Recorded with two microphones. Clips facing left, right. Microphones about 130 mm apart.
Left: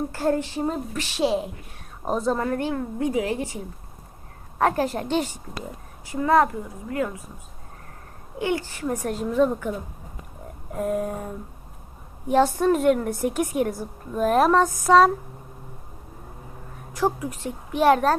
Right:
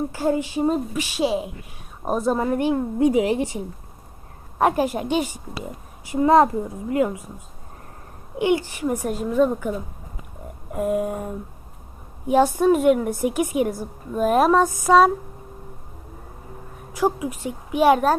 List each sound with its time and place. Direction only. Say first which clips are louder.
0.1 s a woman's voice: right 1 dB; 5° right (ahead or behind)
6.1 s a child's voice: right 4 dB; 20° right (ahead or behind)
8.4 s a woman's voice: right 5 dB; 20° right (ahead or behind)
12.3 s a woman's voice: right 2 dB; 5° right (ahead or behind)
16.9 s a woman's voice: right 2 dB; 5° right (ahead or behind)